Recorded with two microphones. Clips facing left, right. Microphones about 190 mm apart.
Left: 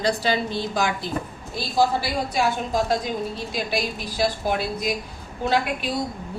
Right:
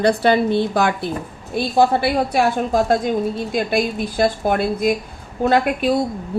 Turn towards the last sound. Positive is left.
turn(degrees=-50)  # may be behind; listen again after turning